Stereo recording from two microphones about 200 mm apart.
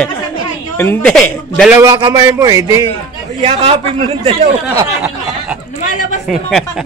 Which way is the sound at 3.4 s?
30° right (ahead or behind).